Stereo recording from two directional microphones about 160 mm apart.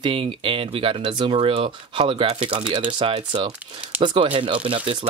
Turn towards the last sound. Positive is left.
turn(degrees=-35)  # may be behind; listen again after turning